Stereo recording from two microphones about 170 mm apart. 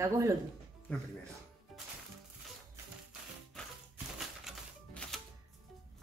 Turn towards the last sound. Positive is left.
turn(degrees=5)  # may be behind; listen again after turning